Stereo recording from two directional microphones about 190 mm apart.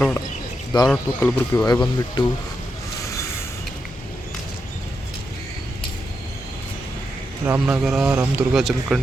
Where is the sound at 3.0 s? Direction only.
15° left (ahead or behind).